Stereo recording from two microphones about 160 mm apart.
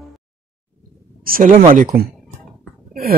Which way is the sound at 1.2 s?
65° right (ahead or behind).